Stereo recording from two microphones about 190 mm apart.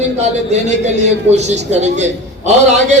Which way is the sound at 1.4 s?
35° right (ahead or behind).